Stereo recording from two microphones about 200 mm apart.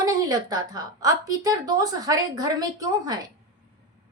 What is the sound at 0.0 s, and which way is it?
Speech, 20° right (ahead or behind).